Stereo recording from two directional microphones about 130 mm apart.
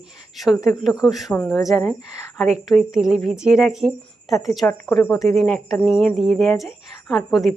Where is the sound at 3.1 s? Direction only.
55° right (ahead or behind).